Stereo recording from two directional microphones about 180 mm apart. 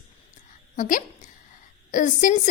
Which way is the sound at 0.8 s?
45° left (ahead or behind).